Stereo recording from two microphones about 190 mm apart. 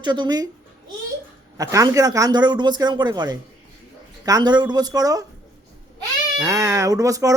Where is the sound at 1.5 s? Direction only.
15° right (ahead or behind).